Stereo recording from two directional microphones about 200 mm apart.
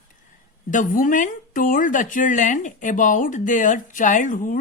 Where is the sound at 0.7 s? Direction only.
40° left (ahead or behind).